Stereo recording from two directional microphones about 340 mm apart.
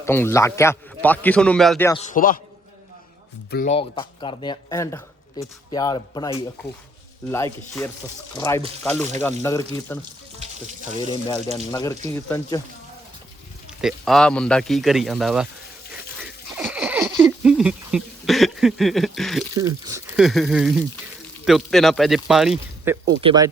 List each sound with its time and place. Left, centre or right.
0.0 s speech: centre
2.0 s a man's voice: left
3.5 s speech: left
11.5 s speech: centre
13.7 s speech: centre
16.2 s a sound: centre
19.5 s speech: centre